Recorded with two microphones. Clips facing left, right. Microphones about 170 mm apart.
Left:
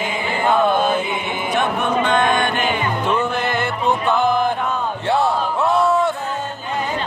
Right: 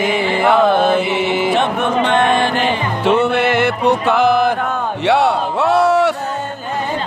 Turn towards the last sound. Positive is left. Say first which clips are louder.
# right 4 dB
turn(degrees=-75)  # may be behind; listen again after turning